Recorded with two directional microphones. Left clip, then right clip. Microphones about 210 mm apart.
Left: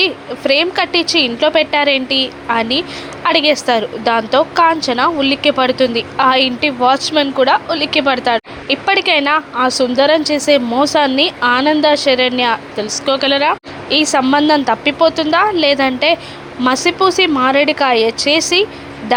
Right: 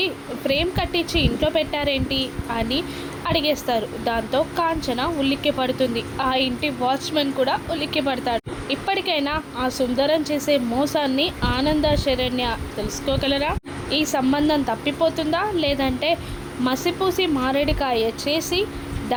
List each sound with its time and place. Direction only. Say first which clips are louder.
0.0 s a woman's voice: left 9 dB; 15° left (ahead or behind)